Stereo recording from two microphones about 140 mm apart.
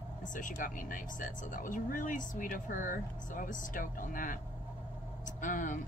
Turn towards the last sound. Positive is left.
turn(degrees=70)  # may be behind; listen again after turning